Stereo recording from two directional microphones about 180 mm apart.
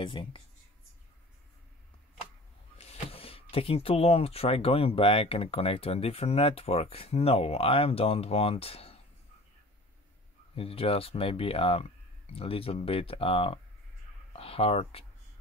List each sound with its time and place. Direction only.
0.0 s speech: 25° left (ahead or behind)
2.8 s speech: 35° left (ahead or behind)
10.5 s speech: 30° left (ahead or behind)